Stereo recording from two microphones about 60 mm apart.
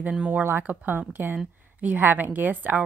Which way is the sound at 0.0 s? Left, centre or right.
Right.